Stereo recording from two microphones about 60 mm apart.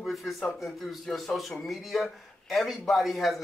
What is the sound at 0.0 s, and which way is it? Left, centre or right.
A man's voice, centre.